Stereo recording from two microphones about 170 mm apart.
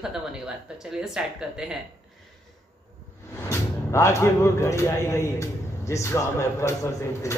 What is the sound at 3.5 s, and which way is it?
Speech, 15° left (ahead or behind).